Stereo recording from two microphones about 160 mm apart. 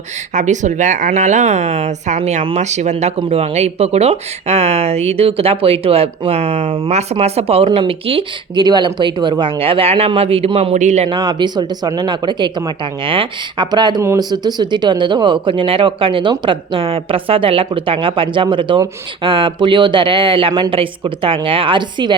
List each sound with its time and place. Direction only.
0.3 s a woman's voice: 50° right (ahead or behind)
11.1 s a woman's voice: 25° right (ahead or behind)